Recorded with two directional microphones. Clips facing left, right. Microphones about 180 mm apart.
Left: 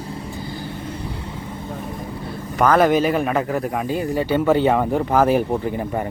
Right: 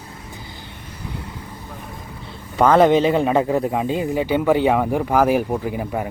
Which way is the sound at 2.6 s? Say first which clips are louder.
Right 2 dB; 20° right (ahead or behind).